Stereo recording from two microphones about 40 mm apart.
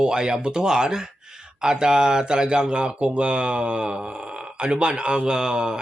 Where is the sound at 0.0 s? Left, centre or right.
Right.